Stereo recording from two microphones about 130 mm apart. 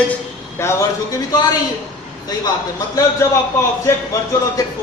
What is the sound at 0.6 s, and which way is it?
Speech, 20° left (ahead or behind).